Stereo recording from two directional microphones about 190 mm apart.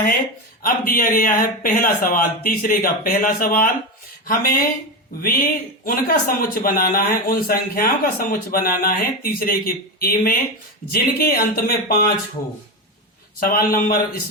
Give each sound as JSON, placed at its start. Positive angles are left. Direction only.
{"t": 0.6, "sound": "a man's voice", "side_deg": 50}
{"t": 13.4, "sound": "a man's voice", "side_deg": 50}